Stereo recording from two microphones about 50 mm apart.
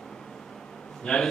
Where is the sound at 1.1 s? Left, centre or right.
Centre.